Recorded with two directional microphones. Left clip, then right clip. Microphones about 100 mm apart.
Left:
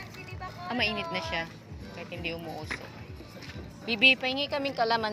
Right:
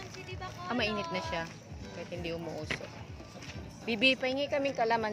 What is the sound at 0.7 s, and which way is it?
Speech, 55° right (ahead or behind).